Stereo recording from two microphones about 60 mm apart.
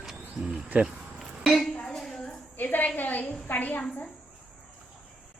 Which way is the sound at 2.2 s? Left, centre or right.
Left.